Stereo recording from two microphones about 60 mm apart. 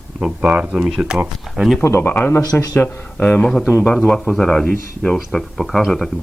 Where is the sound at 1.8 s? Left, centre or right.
Left.